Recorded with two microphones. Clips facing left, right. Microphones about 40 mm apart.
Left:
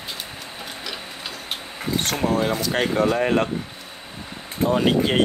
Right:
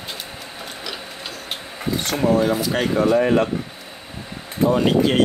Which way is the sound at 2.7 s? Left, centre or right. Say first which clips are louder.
Right 1 dB; left.